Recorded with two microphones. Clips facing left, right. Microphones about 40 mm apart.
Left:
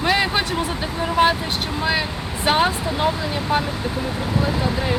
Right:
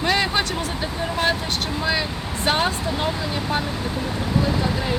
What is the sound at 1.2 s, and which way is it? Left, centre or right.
Speech, left.